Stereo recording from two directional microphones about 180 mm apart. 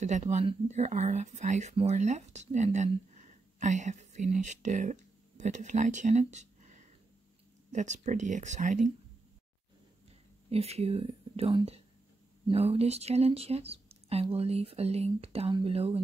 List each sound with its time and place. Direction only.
0.0 s speech: 40° right (ahead or behind)
10.5 s speech: 35° right (ahead or behind)